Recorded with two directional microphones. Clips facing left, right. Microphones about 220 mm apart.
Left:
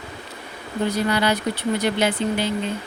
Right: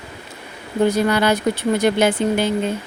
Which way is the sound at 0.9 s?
50° right (ahead or behind).